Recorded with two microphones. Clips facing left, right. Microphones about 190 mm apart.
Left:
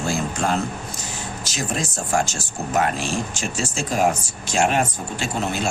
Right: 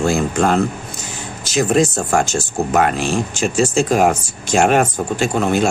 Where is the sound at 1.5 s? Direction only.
60° right (ahead or behind).